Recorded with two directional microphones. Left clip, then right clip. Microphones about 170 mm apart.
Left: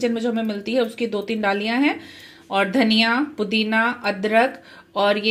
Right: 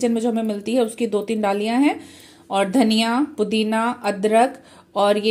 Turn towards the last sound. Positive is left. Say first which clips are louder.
# right 1 dB
turn(degrees=-10)  # may be behind; listen again after turning